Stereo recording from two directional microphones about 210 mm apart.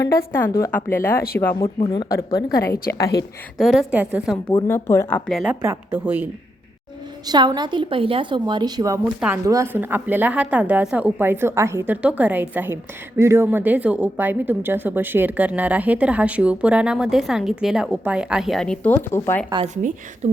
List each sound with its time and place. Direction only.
0.3 s a woman's voice: 15° left (ahead or behind)
2.6 s a woman's voice: 45° left (ahead or behind)
3.6 s a woman's voice: centre (ahead or behind)
4.5 s a woman's voice: 15° left (ahead or behind); by 6.2 s 10° right (ahead or behind)
7.3 s a woman's voice: 20° right (ahead or behind); by 19.5 s 10° left (ahead or behind)
19.6 s a woman's voice: 35° right (ahead or behind)